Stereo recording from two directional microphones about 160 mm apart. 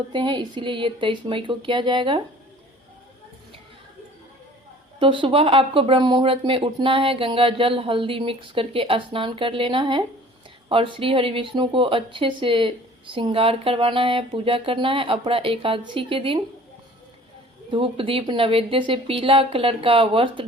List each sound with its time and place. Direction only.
0.1 s a woman's voice: 30° right (ahead or behind)
4.9 s a woman's voice: 30° right (ahead or behind)
17.7 s a woman's voice: 35° right (ahead or behind)